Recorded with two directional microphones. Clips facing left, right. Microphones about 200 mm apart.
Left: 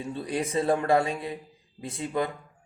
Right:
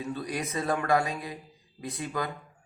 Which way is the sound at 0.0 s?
30° left (ahead or behind).